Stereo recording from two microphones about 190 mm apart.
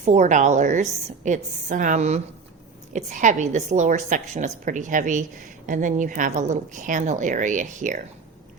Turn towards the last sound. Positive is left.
turn(degrees=-40)  # may be behind; listen again after turning